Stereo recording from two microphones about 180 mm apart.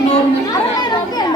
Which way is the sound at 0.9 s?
20° left (ahead or behind).